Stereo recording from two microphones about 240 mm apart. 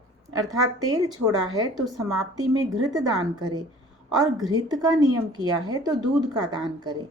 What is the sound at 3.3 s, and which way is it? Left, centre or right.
A woman's voice, centre.